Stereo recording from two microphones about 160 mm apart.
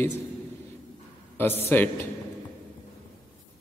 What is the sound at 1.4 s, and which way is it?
Speech, 15° left (ahead or behind).